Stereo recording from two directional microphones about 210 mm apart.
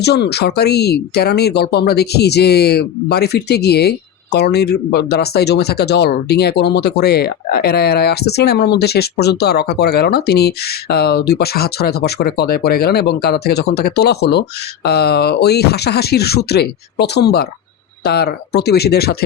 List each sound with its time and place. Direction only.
0.0 s speech: 50° left (ahead or behind)